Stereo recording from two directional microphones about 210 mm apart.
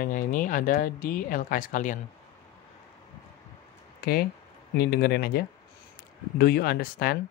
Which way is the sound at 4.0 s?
45° left (ahead or behind).